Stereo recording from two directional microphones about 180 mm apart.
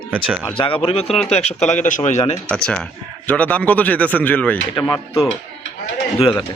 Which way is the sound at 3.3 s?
10° left (ahead or behind).